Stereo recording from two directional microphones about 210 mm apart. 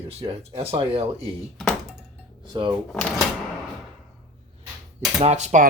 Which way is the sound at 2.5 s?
20° right (ahead or behind).